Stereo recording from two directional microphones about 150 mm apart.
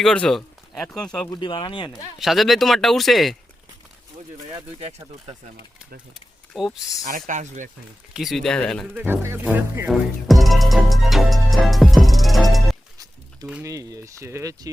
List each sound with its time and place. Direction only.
0.0 s speech: 5° left (ahead or behind)
1.3 s speech: 35° left (ahead or behind)
2.1 s speech: centre (ahead or behind)
6.5 s speech: centre (ahead or behind)
7.3 s speech: 55° right (ahead or behind)
8.1 s speech: centre (ahead or behind)
8.9 s speech: 15° right (ahead or behind)
9.9 s music: centre (ahead or behind)
13.6 s speech: 20° right (ahead or behind)